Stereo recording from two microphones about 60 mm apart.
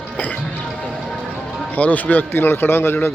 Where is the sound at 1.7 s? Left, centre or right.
Left.